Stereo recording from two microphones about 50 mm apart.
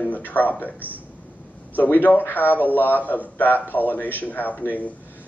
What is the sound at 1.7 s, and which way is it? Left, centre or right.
A man's voice, left.